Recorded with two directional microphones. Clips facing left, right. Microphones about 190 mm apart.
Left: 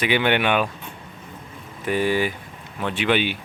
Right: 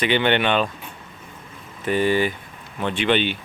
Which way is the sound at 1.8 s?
10° left (ahead or behind).